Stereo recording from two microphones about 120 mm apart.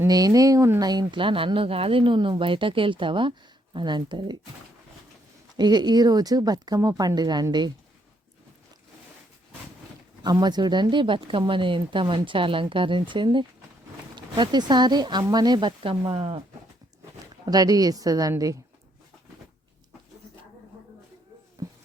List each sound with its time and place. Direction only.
0.1 s speech: 30° right (ahead or behind)
5.5 s speech: 35° right (ahead or behind)
10.2 s speech: 35° right (ahead or behind); by 16.4 s 55° right (ahead or behind)
17.4 s speech: 30° right (ahead or behind)
21.6 s a sound: 30° right (ahead or behind)